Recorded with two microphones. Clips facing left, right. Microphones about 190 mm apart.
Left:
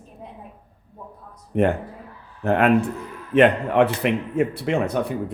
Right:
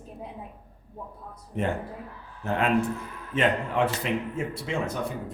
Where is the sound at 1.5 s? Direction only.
60° left (ahead or behind).